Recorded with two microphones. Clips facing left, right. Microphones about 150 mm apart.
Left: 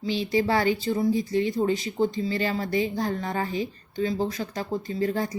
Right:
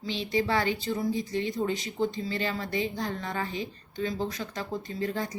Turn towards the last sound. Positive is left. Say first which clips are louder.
# left 5 dB
turn(degrees=35)  # may be behind; listen again after turning